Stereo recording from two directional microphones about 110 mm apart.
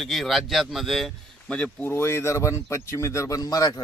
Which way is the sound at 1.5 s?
10° left (ahead or behind).